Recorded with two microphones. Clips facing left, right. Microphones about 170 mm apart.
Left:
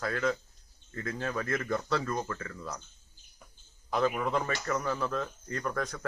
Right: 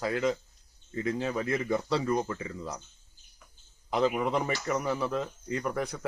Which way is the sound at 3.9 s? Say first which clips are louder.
Right 2 dB; 15° right (ahead or behind).